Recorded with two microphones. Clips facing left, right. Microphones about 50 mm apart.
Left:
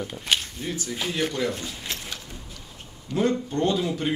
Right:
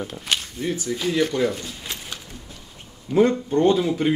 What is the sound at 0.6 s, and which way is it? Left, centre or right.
Speech, right.